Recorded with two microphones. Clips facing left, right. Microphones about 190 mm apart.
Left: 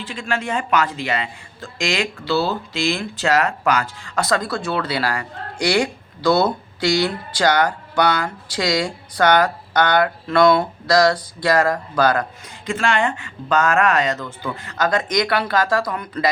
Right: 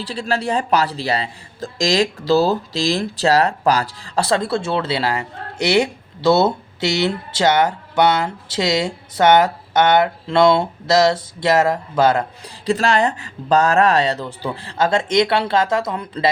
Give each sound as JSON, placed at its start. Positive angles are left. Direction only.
{"t": 0.0, "sound": "speech", "side_deg": -35}
{"t": 12.6, "sound": "speech", "side_deg": -35}